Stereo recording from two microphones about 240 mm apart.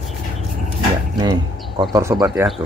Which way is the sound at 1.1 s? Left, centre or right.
Centre.